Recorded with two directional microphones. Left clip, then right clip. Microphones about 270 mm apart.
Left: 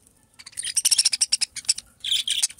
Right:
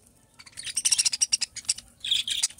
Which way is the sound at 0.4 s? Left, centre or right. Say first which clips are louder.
Left 4 dB; left.